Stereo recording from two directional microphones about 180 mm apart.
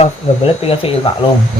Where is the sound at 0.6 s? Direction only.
30° left (ahead or behind).